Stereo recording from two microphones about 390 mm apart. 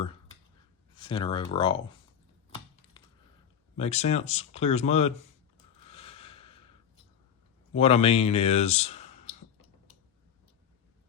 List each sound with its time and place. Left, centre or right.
0.9 s speech: centre
3.8 s speech: centre
5.8 s a sound: centre
7.8 s speech: centre